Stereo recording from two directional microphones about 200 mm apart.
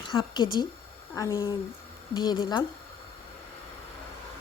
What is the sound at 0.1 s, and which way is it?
A woman's voice, 25° left (ahead or behind).